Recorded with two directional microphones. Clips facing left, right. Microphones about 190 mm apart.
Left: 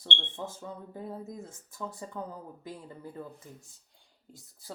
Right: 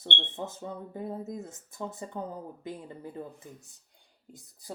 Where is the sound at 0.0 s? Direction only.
20° right (ahead or behind).